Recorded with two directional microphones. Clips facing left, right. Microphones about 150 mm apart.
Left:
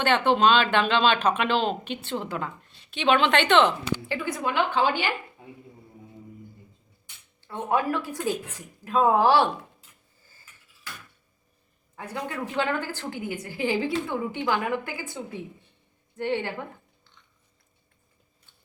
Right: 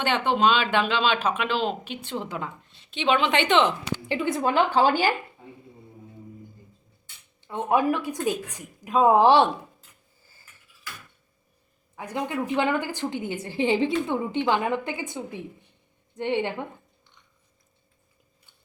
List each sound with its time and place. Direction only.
0.0 s a woman's voice: 15° right (ahead or behind); by 5.1 s 40° right (ahead or behind)
7.4 s speech: 15° right (ahead or behind)
11.9 s a woman's voice: 15° right (ahead or behind)